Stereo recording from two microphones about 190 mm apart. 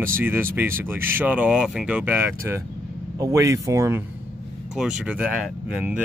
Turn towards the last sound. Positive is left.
turn(degrees=-5)  # may be behind; listen again after turning